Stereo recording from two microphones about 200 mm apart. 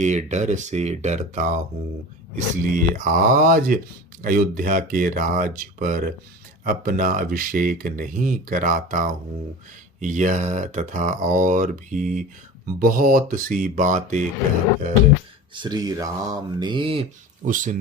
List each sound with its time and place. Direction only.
0.0 s speech: 35° right (ahead or behind)
15.5 s speech: 20° right (ahead or behind)
17.4 s speech: 40° right (ahead or behind)